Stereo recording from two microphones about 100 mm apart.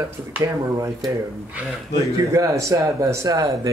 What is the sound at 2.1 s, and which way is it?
Speech, 30° right (ahead or behind).